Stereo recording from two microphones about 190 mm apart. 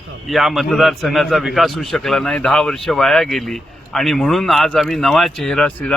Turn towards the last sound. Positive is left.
turn(degrees=5)  # may be behind; listen again after turning